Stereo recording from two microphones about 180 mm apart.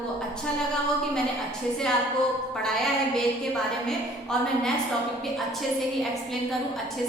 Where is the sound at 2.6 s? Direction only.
Centre (ahead or behind).